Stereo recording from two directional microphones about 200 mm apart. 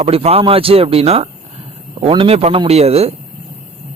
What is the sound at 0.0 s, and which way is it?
A man's voice, 30° right (ahead or behind).